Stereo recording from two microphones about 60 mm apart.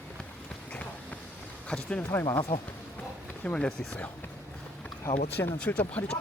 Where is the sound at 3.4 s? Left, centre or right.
Centre.